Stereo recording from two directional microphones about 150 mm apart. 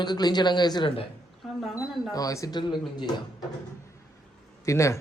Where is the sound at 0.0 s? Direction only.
30° left (ahead or behind).